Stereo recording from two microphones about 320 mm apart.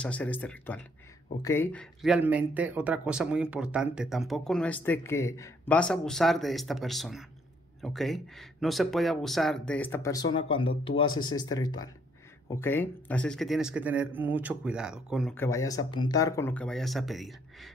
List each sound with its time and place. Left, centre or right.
0.0 s speech: centre